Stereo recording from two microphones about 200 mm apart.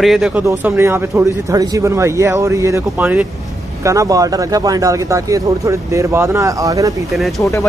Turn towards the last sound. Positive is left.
turn(degrees=0)  # may be behind; listen again after turning